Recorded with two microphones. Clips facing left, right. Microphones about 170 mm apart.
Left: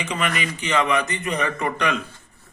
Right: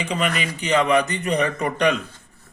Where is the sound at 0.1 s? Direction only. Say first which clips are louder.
Right 1 dB; 35° right (ahead or behind).